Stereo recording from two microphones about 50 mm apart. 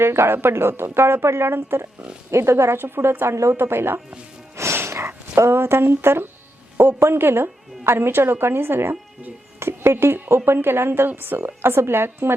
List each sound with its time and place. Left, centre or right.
0.0 s a woman's voice: right
2.3 s a woman's voice: right
4.5 s music: right
5.4 s a woman's voice: right
11.1 s a woman's voice: right